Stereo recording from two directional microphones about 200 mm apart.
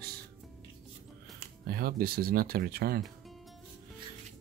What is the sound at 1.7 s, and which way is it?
Speech, 50° right (ahead or behind).